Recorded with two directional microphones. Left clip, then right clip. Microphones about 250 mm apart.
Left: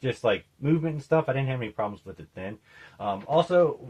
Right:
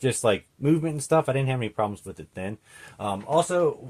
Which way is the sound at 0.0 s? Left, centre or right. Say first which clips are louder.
Right 2 dB; right.